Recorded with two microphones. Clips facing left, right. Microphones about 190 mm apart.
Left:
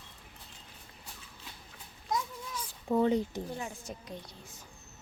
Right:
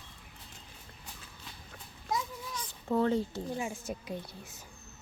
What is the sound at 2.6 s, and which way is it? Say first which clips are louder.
Cat: left 1 dB; 10° left (ahead or behind).